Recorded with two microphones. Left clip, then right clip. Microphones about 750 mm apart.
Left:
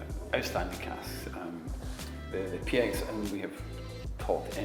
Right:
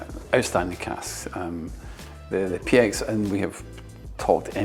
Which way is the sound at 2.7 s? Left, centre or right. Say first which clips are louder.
Right 10 dB; right.